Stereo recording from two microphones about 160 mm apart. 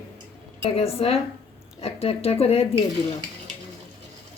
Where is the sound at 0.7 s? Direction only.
40° left (ahead or behind).